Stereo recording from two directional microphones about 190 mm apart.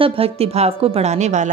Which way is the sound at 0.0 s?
30° right (ahead or behind).